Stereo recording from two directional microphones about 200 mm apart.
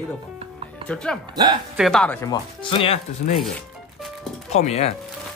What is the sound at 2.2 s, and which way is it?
Speech, 20° left (ahead or behind).